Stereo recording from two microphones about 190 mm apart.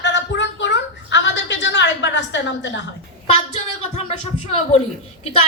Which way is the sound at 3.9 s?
35° left (ahead or behind).